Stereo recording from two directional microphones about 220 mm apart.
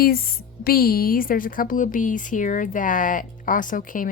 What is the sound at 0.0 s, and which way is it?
Speech, 40° left (ahead or behind).